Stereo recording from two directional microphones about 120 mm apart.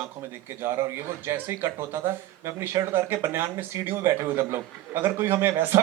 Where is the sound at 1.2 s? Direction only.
20° right (ahead or behind).